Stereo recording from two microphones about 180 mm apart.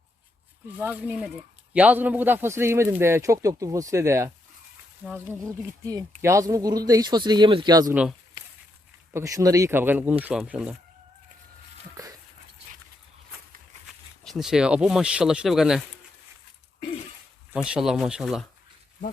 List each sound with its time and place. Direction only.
0.8 s a man's voice: 10° right (ahead or behind)
9.1 s a man's voice: 20° right (ahead or behind)
13.8 s speech: centre (ahead or behind)
17.5 s speech: 5° right (ahead or behind)